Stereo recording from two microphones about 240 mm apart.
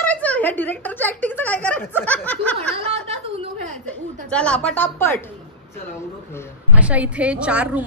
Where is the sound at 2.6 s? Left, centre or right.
Right.